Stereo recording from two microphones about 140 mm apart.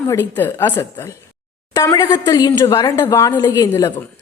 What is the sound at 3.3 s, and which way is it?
Speech, 30° left (ahead or behind).